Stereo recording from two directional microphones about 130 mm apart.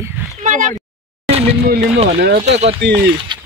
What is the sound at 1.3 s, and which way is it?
Speech, 55° right (ahead or behind).